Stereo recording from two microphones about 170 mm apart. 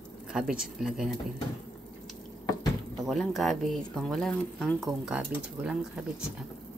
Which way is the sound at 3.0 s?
Centre (ahead or behind).